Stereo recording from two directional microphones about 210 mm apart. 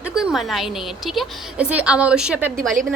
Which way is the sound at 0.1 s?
5° right (ahead or behind).